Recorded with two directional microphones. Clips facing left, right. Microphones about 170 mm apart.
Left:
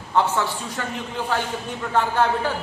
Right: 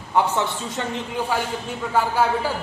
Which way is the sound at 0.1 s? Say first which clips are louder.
Even; 15° right (ahead or behind).